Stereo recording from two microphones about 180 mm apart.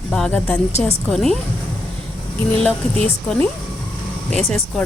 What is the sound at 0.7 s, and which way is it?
Speech, 35° left (ahead or behind).